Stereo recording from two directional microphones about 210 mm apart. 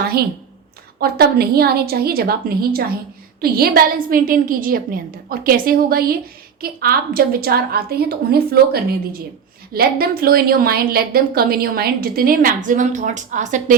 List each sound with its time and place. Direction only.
0.9 s a woman's voice: 45° right (ahead or behind)